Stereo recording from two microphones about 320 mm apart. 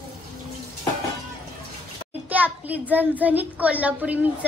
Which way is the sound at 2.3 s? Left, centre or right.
Centre.